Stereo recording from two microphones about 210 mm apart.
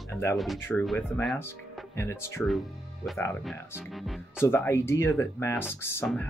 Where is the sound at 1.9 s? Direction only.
10° left (ahead or behind).